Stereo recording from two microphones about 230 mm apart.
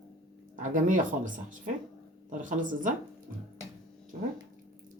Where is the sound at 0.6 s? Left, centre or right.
Right.